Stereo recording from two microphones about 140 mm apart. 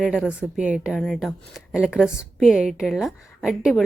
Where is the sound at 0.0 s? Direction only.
5° right (ahead or behind).